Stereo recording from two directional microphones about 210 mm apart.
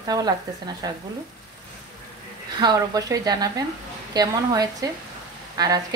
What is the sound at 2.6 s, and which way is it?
Speech, 20° right (ahead or behind).